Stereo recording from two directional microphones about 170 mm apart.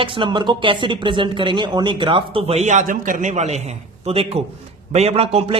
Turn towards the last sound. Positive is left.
turn(degrees=-35)  # may be behind; listen again after turning